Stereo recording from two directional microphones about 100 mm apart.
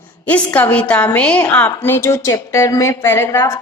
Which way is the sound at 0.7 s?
15° left (ahead or behind).